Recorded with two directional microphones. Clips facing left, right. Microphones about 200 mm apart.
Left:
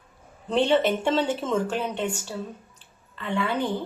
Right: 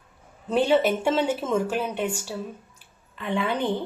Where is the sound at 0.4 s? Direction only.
5° right (ahead or behind).